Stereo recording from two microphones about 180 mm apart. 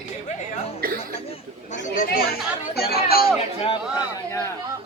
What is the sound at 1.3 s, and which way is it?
Chatter, 40° left (ahead or behind).